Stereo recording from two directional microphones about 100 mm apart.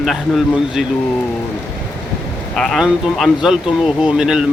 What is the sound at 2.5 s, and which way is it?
Speech, 5° left (ahead or behind).